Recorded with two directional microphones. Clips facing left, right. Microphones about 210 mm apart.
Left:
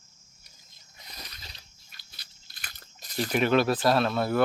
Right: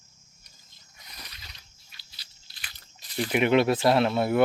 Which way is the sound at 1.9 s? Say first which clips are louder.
Left 2 dB; 50° left (ahead or behind).